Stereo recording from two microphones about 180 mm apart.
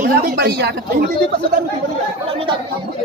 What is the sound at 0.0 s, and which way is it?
Speech, 55° right (ahead or behind).